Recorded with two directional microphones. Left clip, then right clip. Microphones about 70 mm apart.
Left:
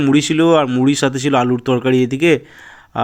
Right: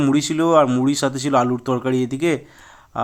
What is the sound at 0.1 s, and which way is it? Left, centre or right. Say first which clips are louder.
Speech: left 5 dB; left.